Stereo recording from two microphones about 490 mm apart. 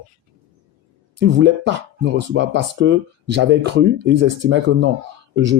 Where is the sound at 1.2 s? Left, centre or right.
Right.